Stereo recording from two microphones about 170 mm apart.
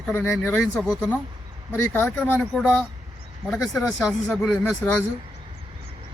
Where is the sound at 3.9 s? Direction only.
Centre (ahead or behind).